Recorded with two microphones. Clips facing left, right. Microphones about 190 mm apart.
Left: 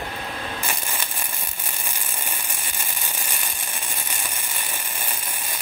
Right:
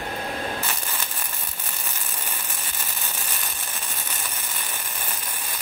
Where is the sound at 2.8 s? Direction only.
10° left (ahead or behind).